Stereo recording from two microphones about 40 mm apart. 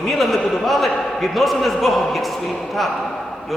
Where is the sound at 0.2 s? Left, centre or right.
Centre.